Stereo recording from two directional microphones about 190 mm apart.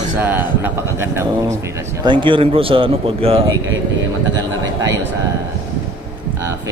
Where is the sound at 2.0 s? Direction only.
25° right (ahead or behind).